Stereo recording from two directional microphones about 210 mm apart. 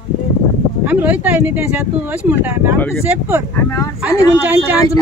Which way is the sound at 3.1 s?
10° right (ahead or behind).